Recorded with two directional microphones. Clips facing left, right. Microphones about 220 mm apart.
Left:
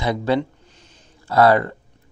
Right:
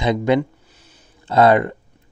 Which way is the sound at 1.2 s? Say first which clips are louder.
Right 1 dB; 20° right (ahead or behind).